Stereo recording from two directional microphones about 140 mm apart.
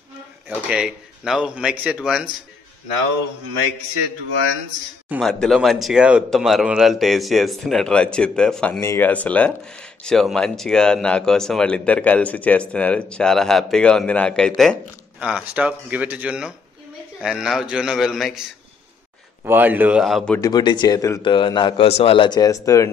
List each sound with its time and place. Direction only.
0.5 s speech: 5° right (ahead or behind)
5.2 s a man's voice: 5° left (ahead or behind)
8.7 s speech: 15° left (ahead or behind)
15.1 s a man's voice: 5° right (ahead or behind)
19.4 s speech: 15° right (ahead or behind)
20.3 s a man's voice: 30° left (ahead or behind)